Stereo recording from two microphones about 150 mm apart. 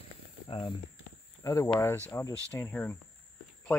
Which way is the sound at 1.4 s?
20° left (ahead or behind).